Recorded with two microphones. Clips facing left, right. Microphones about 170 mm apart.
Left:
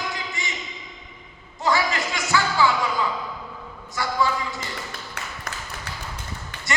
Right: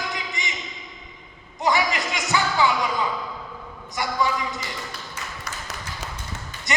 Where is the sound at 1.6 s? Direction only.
20° right (ahead or behind).